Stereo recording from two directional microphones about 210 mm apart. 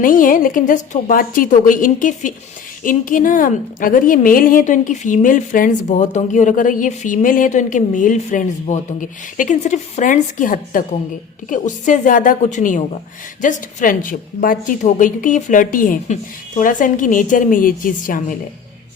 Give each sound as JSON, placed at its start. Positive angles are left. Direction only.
{"t": 0.0, "sound": "a woman's voice", "side_deg": 40}